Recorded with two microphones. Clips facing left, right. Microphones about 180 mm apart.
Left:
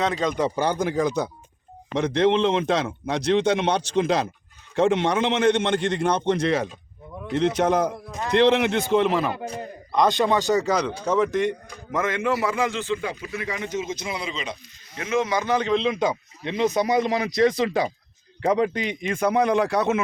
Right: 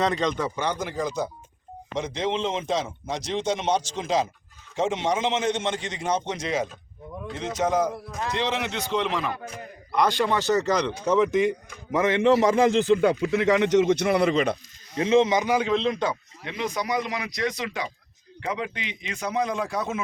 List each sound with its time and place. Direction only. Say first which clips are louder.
0.0 s a man's voice: even; 5° left (ahead or behind)
0.5 s speech: left 5 dB; 45° left (ahead or behind)
9.4 s speech: left 6 dB; 30° left (ahead or behind)
10.0 s a man's voice: left 3 dB; 15° left (ahead or behind); by 11.5 s centre (ahead or behind)
11.9 s a man's voice: right 4 dB; 15° right (ahead or behind)
12.5 s speech: right 6 dB; 40° right (ahead or behind)
13.0 s a man's voice: right 9 dB; 65° right (ahead or behind)
14.9 s a man's voice: right 4 dB; 30° right (ahead or behind)
15.5 s a man's voice: left 1 dB; 5° right (ahead or behind)
16.4 s speech: left 9 dB; 25° left (ahead or behind); by 20.0 s 70° left (ahead or behind)